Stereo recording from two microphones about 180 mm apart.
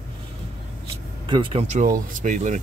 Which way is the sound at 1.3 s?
25° right (ahead or behind).